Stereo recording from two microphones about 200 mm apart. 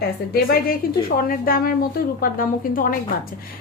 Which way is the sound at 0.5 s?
45° left (ahead or behind).